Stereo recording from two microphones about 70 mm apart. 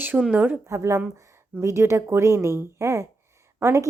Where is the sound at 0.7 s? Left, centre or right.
Right.